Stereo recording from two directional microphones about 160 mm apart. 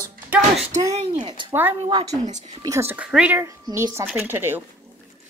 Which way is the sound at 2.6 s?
15° right (ahead or behind).